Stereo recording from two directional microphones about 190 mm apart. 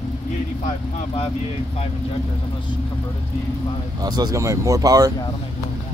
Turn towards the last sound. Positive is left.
turn(degrees=-20)  # may be behind; listen again after turning